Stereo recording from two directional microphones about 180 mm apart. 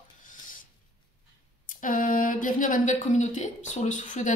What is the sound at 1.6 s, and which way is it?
Speech, 50° left (ahead or behind).